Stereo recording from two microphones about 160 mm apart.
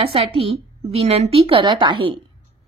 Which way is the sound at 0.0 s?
35° right (ahead or behind).